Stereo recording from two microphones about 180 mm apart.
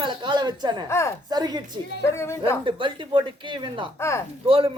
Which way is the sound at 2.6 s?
30° right (ahead or behind).